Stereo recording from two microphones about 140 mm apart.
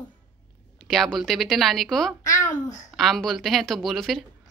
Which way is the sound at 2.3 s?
65° left (ahead or behind).